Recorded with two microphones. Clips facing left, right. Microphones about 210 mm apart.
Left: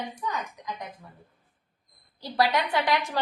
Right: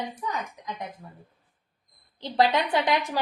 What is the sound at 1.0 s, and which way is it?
Speech, 35° right (ahead or behind).